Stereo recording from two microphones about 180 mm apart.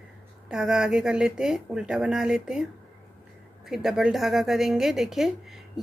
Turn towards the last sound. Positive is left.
turn(degrees=0)  # may be behind; listen again after turning